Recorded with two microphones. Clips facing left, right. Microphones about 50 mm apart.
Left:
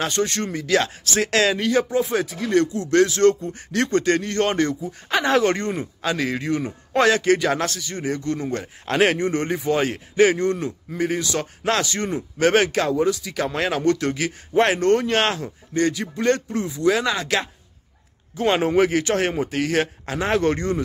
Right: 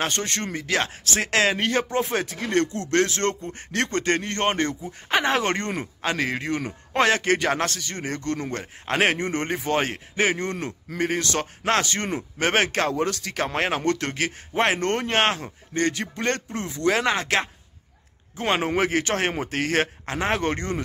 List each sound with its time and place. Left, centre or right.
0.0 s speech: right
8.8 s speech: right
11.0 s speech: right
11.6 s speech: right
13.0 s speech: right
13.4 s speech: right
14.5 s speech: right